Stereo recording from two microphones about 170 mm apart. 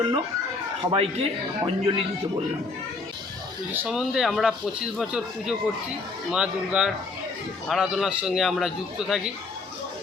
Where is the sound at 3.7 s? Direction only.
10° right (ahead or behind).